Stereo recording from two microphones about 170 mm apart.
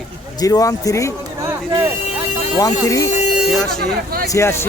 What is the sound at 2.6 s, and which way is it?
Speech, 20° left (ahead or behind).